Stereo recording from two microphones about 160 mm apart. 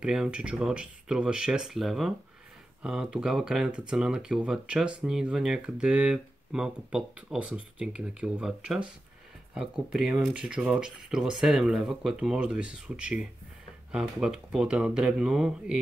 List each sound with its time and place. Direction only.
0.0 s speech: 5° right (ahead or behind)